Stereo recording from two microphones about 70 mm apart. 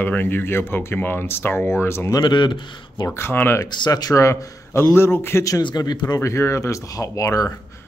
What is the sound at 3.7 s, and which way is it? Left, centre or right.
A man's voice, left.